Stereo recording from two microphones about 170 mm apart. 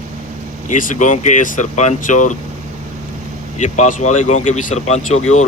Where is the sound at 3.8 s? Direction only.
45° left (ahead or behind).